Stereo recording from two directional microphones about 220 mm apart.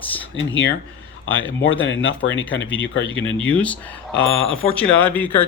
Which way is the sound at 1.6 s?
60° left (ahead or behind).